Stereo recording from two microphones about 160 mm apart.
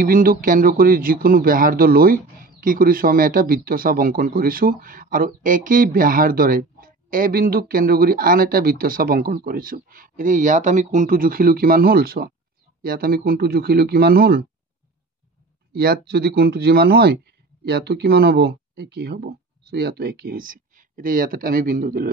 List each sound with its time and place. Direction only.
0.0 s speech: 60° right (ahead or behind)
15.7 s speech: 80° right
17.6 s speech: 90° right; by 22.1 s 60° right (ahead or behind)